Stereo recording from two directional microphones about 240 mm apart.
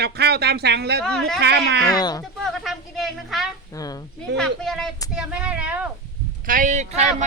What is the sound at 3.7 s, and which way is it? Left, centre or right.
Speech, centre.